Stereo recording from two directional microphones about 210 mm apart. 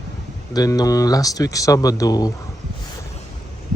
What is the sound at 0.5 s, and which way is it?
Speech, 20° left (ahead or behind).